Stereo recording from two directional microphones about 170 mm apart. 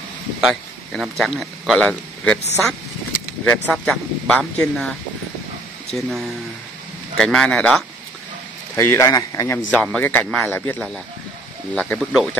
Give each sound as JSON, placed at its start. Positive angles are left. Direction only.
{"t": 0.4, "sound": "speech", "side_deg": -5}
{"t": 3.4, "sound": "a man's voice", "side_deg": 0}
{"t": 5.9, "sound": "a man's voice", "side_deg": 0}
{"t": 8.7, "sound": "a man's voice", "side_deg": 15}
{"t": 9.8, "sound": "a man's voice", "side_deg": 5}